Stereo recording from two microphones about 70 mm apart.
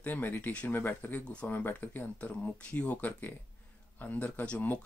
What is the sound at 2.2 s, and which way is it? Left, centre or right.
Speech, centre.